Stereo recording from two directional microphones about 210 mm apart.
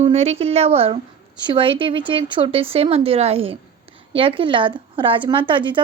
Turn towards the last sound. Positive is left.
turn(degrees=-25)  # may be behind; listen again after turning